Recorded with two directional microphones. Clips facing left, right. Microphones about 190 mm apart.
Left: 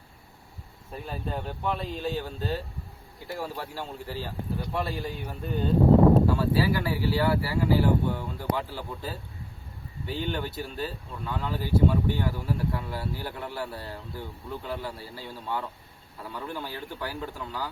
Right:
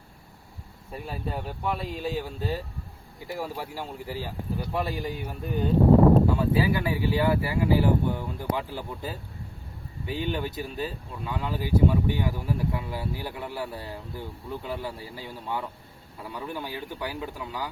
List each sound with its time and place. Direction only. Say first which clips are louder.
1.0 s speech: even; 5° right (ahead or behind)